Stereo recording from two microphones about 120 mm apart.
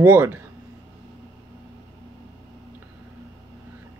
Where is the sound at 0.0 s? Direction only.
15° right (ahead or behind).